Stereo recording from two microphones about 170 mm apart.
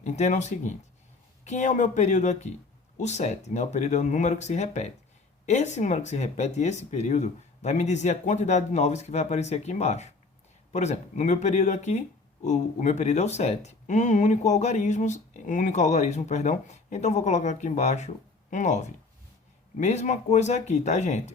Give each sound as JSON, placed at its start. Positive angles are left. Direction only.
{"t": 0.0, "sound": "speech", "side_deg": 45}